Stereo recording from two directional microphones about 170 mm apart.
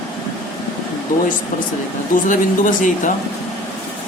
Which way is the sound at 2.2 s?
50° left (ahead or behind).